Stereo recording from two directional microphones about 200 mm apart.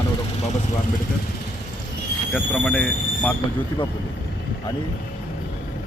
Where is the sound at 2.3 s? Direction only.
5° left (ahead or behind).